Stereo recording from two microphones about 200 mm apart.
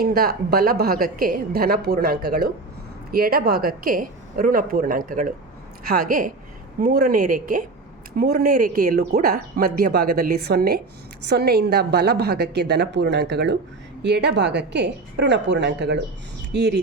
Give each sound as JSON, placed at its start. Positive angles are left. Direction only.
{"t": 0.0, "sound": "a woman's voice", "side_deg": -50}